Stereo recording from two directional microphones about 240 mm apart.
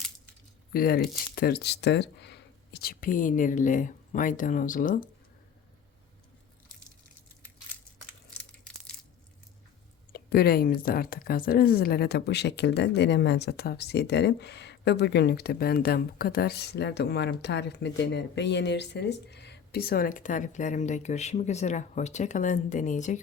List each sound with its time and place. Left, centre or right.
0.7 s speech: left
10.1 s speech: left